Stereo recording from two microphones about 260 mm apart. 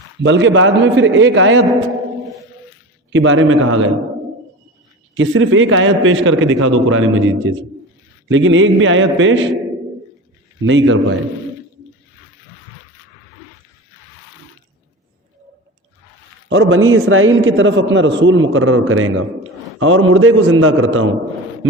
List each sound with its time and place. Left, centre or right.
0.2 s a man's voice: right
3.1 s a man's voice: right
5.1 s a man's voice: right
10.7 s a man's voice: right
16.5 s a man's voice: right